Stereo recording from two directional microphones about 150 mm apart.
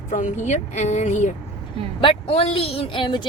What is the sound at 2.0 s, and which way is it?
A woman's voice, 40° left (ahead or behind).